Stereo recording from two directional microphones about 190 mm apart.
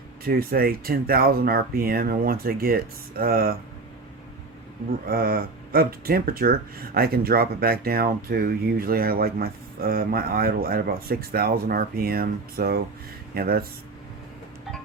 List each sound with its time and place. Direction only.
0.3 s speech: 50° right (ahead or behind)
5.0 s speech: 50° right (ahead or behind)